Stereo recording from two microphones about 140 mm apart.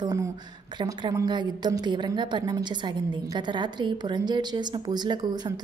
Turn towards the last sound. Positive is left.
turn(degrees=-30)  # may be behind; listen again after turning